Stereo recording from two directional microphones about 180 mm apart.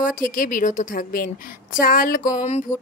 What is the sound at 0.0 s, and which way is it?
A woman's voice, 50° left (ahead or behind).